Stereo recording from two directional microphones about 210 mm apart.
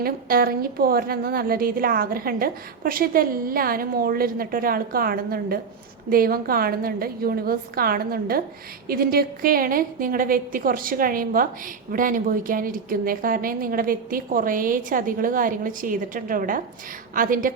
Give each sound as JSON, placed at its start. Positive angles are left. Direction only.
{"t": 0.0, "sound": "a woman's voice", "side_deg": -45}